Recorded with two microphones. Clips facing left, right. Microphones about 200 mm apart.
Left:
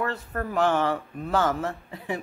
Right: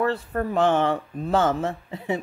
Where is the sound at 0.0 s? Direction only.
30° right (ahead or behind).